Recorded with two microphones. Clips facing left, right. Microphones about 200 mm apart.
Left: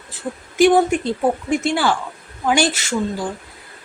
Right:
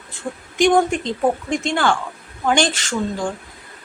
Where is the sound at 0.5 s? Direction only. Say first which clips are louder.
Left 2 dB; 5° left (ahead or behind).